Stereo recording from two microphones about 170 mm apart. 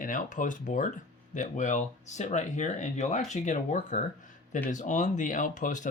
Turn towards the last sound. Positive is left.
turn(degrees=50)  # may be behind; listen again after turning